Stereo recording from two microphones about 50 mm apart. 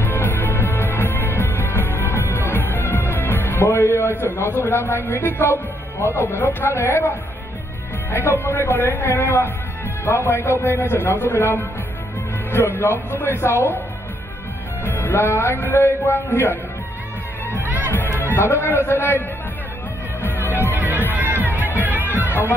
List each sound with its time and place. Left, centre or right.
0.0 s music: left
3.7 s a man's voice: left
6.8 s speech: left
8.1 s a man's voice: left
14.9 s music: left
15.6 s a man's voice: left
17.6 s music: right
17.9 s a man's voice: left
20.7 s music: right